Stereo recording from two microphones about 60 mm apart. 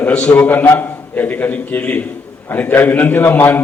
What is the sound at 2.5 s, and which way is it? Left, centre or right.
A man's voice, left.